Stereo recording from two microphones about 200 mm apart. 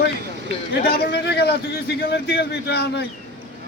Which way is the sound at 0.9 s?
55° left (ahead or behind).